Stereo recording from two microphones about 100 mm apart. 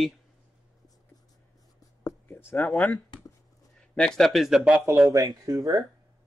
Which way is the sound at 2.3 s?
25° left (ahead or behind).